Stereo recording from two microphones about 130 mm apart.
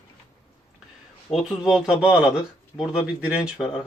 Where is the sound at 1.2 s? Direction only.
5° right (ahead or behind).